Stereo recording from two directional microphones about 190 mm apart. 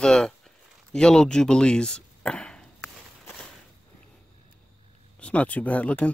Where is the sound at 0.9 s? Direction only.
5° left (ahead or behind).